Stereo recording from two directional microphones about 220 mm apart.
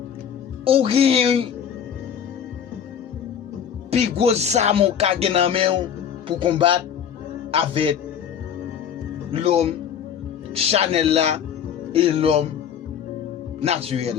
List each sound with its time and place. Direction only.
0.6 s music: 25° right (ahead or behind)
3.9 s music: 30° right (ahead or behind)
9.3 s music: 25° right (ahead or behind)
13.6 s music: 25° right (ahead or behind)